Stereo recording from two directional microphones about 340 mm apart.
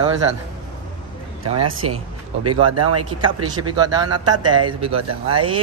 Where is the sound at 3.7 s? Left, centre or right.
Centre.